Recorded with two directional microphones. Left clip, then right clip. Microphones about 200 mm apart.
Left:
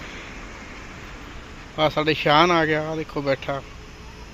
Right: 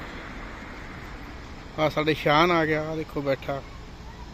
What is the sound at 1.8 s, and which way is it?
Speech, 10° left (ahead or behind).